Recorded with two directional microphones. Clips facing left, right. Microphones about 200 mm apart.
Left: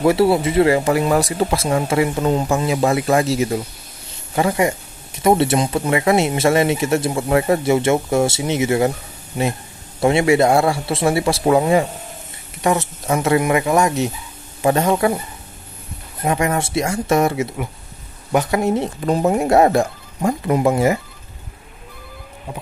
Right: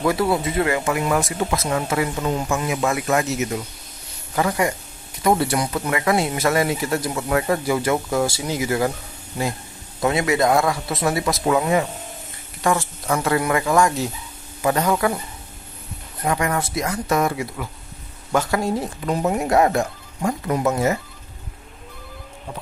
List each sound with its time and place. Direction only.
0.0 s speech: 30° left (ahead or behind)
16.3 s speech: 25° left (ahead or behind)
18.9 s speech: 30° left (ahead or behind)